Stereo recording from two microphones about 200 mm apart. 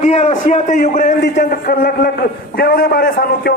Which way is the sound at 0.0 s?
30° left (ahead or behind).